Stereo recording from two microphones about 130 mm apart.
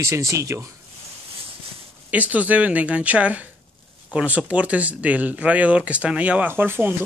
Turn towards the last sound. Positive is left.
turn(degrees=-15)  # may be behind; listen again after turning